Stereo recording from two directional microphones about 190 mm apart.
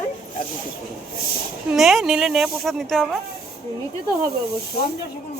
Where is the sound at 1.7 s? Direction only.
Centre (ahead or behind).